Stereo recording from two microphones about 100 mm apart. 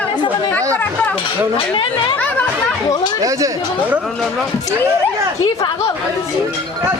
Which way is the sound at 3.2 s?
35° right (ahead or behind).